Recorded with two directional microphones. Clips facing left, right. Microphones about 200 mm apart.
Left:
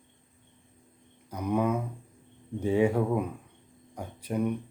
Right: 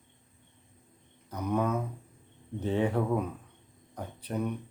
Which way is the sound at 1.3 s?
10° left (ahead or behind).